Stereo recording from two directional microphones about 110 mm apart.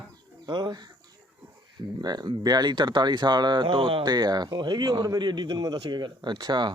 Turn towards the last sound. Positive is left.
turn(degrees=-40)  # may be behind; listen again after turning